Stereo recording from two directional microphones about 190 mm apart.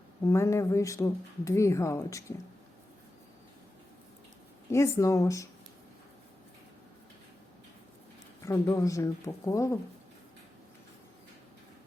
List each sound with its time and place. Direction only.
0.3 s speech: 15° left (ahead or behind)
4.7 s speech: 15° left (ahead or behind)
8.4 s speech: 15° left (ahead or behind)